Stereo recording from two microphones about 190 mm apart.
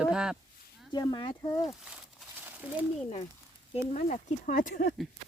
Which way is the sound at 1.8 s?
5° right (ahead or behind).